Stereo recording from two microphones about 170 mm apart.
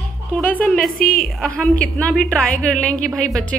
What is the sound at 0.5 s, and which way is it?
Speech, 5° left (ahead or behind).